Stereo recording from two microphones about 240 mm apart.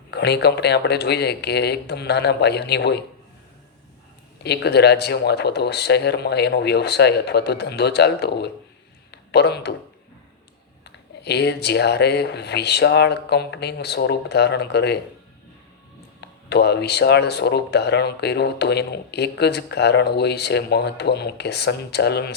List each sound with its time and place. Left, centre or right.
0.1 s speech: left
4.4 s speech: left
10.8 s speech: left
16.2 s speech: left